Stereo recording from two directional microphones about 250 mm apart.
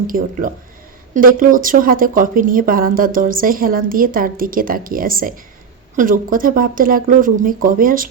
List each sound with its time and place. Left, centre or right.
0.1 s speech: right